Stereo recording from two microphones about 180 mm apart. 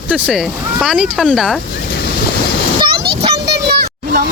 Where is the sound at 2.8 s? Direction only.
60° right (ahead or behind).